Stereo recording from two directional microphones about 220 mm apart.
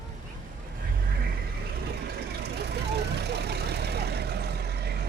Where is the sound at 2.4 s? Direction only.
50° right (ahead or behind).